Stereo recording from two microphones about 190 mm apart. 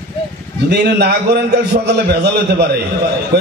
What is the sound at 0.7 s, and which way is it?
A man's voice, 60° right (ahead or behind).